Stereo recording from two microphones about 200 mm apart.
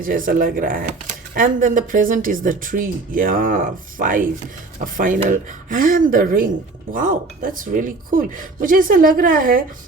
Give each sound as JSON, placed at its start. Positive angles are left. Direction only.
{"t": 0.0, "sound": "speech", "side_deg": -45}